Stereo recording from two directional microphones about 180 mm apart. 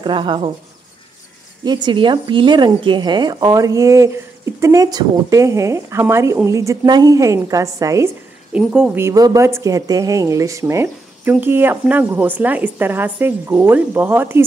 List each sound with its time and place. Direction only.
0.0 s speech: 25° right (ahead or behind)
1.6 s speech: 25° right (ahead or behind)
8.5 s speech: 5° right (ahead or behind)